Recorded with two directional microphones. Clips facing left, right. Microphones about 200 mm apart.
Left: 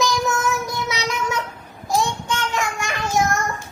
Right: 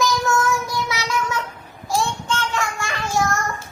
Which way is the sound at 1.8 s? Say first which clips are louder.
Left 1 dB; 15° left (ahead or behind).